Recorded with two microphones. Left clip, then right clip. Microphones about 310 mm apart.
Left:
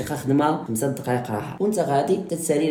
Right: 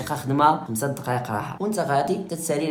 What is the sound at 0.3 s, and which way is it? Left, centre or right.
Speech, centre.